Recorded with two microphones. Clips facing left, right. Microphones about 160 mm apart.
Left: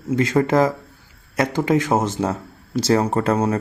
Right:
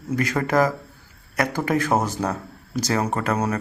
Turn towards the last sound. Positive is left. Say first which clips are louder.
# left 4 dB
turn(degrees=30)  # may be behind; listen again after turning